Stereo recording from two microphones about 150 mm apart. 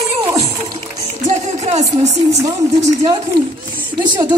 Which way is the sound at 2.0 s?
50° right (ahead or behind).